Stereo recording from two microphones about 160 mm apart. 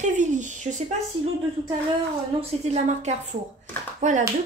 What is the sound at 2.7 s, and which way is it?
A woman's voice, 45° right (ahead or behind).